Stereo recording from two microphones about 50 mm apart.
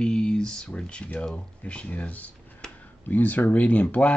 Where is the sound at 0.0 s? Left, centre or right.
Centre.